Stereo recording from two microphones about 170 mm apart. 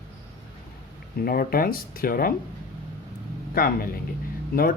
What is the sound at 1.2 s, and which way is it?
Speech, 60° left (ahead or behind).